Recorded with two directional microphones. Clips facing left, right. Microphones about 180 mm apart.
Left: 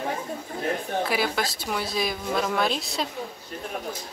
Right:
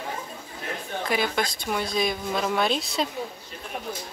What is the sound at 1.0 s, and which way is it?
Speech, 5° left (ahead or behind).